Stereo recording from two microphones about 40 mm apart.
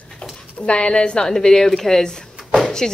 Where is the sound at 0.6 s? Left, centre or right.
Left.